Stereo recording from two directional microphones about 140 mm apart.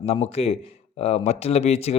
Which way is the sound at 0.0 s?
45° left (ahead or behind).